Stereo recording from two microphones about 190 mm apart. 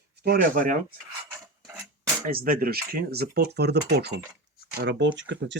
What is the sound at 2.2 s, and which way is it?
Speech, 50° right (ahead or behind).